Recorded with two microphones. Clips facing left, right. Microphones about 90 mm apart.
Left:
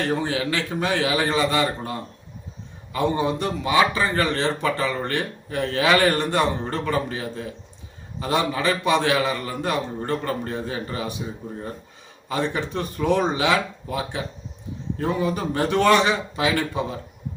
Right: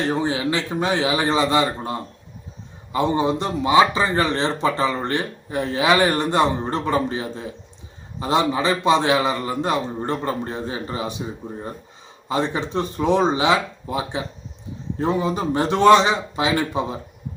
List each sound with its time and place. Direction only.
0.0 s speech: 20° right (ahead or behind)
12.3 s speech: 20° right (ahead or behind)